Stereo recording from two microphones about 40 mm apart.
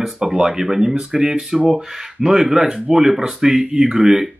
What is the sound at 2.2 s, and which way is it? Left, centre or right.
Speech, centre.